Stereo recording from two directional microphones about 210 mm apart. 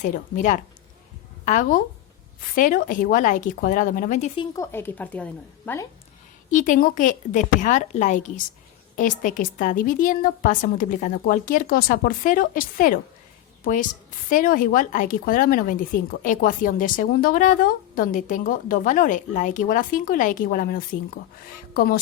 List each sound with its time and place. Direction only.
0.0 s a woman's voice: 40° left (ahead or behind)
4.4 s a woman's voice: 15° left (ahead or behind)
6.5 s a woman's voice: 40° left (ahead or behind)
14.3 s a woman's voice: 40° left (ahead or behind)